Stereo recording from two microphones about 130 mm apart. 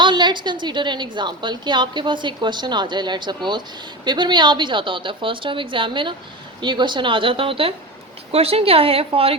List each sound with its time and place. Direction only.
0.0 s a woman's voice: 35° right (ahead or behind)